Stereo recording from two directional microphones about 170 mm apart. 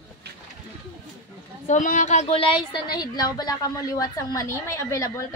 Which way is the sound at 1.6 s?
50° left (ahead or behind).